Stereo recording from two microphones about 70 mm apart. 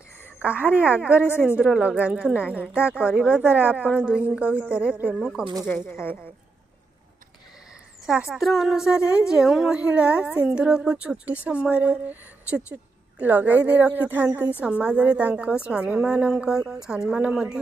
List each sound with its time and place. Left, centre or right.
0.4 s a woman's voice: right
3.4 s a woman's voice: right
5.9 s a woman's voice: left
8.3 s a woman's voice: centre